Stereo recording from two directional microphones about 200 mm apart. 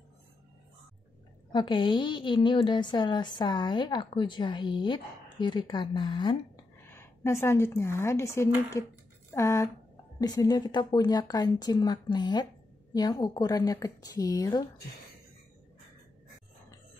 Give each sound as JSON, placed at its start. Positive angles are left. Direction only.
{"t": 1.5, "sound": "a woman's voice", "side_deg": 25}
{"t": 6.8, "sound": "a woman's voice", "side_deg": 10}